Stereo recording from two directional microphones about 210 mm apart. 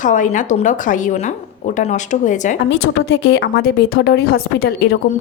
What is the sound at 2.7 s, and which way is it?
Speech, 55° left (ahead or behind).